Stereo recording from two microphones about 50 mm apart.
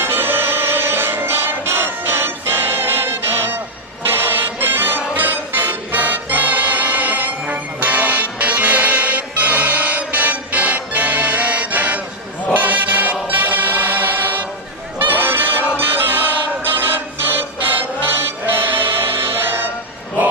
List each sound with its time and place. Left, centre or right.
0.0 s music: right
12.5 s choir: right
15.0 s music: right